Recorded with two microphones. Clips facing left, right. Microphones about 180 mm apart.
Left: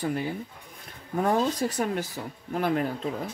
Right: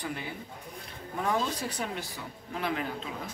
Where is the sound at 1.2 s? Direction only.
45° left (ahead or behind).